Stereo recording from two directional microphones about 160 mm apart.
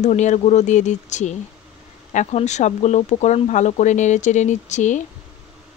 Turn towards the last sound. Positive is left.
turn(degrees=50)  # may be behind; listen again after turning